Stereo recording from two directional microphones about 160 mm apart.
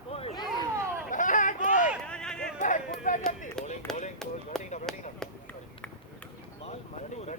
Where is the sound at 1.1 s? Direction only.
55° left (ahead or behind).